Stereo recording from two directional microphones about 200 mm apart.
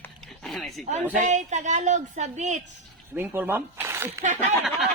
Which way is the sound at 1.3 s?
35° right (ahead or behind).